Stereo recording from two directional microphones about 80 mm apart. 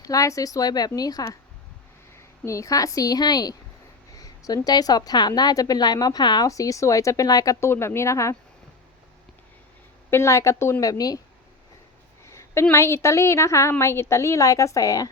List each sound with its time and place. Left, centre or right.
0.0 s a woman's voice: left
2.1 s a woman's voice: left
6.5 s a woman's voice: left
7.6 s a woman's voice: left
10.1 s a woman's voice: left
12.3 s a sound: left
12.7 s a woman's voice: left